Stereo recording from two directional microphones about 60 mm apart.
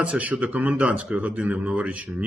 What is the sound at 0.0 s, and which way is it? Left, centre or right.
Speech, right.